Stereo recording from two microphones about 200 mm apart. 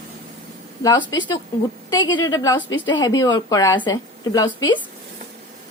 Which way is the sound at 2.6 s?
70° left (ahead or behind).